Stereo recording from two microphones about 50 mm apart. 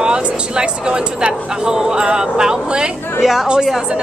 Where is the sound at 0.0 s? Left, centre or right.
Centre.